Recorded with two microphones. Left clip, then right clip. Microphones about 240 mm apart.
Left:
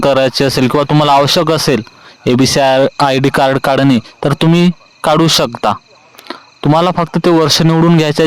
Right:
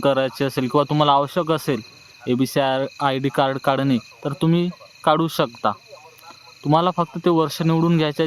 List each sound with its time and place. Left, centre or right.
0.0 s speech: left